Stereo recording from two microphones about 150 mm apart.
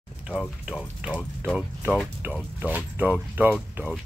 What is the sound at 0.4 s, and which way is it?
Speech, 5° right (ahead or behind).